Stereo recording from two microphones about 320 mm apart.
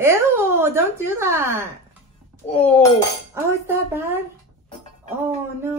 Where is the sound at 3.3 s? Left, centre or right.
Centre.